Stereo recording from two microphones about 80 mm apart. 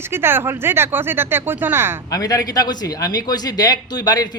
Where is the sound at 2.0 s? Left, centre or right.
Left.